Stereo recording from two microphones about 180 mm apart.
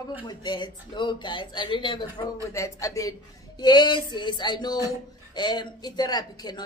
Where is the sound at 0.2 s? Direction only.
25° left (ahead or behind).